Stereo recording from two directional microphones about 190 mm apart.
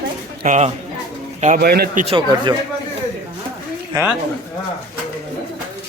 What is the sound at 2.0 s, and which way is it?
Speech, 25° right (ahead or behind).